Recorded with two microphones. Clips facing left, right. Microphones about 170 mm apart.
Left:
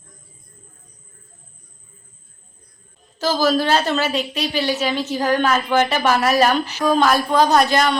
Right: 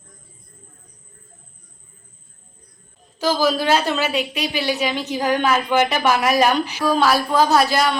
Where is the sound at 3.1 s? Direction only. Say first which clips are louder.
Left 1 dB; 10° right (ahead or behind).